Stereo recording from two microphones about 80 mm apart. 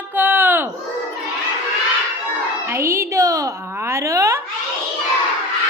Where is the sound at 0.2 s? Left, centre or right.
Right.